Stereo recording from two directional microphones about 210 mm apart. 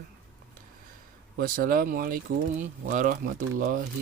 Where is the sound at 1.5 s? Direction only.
45° right (ahead or behind).